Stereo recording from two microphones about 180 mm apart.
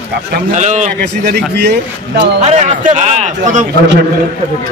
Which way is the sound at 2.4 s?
40° right (ahead or behind).